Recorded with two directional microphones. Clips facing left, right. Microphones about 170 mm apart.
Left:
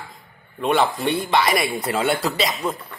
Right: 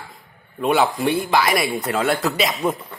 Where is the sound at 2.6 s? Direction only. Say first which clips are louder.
Right 4 dB; 15° right (ahead or behind).